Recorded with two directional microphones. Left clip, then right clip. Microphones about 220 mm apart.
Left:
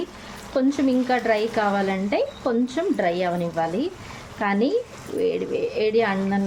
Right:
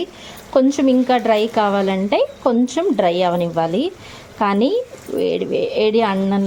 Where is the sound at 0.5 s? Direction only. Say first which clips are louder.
Right 7 dB; 30° right (ahead or behind).